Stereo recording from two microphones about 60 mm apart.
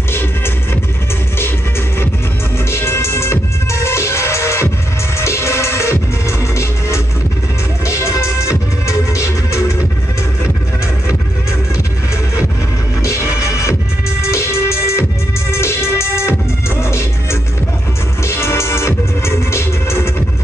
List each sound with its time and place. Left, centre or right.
2.7 s music: left
13.0 s music: left